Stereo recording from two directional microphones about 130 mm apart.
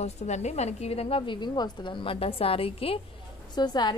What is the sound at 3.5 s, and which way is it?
Speech, 35° left (ahead or behind).